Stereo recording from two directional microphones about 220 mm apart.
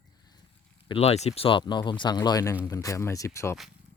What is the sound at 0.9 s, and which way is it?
Speech, 30° left (ahead or behind).